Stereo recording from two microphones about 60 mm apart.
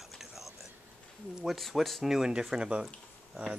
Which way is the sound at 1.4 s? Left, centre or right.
Centre.